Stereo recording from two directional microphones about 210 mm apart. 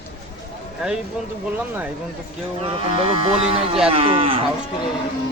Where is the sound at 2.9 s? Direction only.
25° right (ahead or behind).